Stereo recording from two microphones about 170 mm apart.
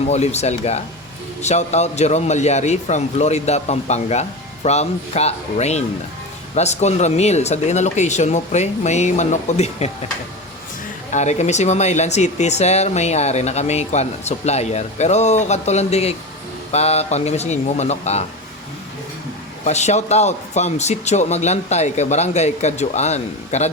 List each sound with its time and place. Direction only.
0.0 s speech: 40° left (ahead or behind)
11.1 s speech: 45° left (ahead or behind)
19.6 s speech: 40° left (ahead or behind)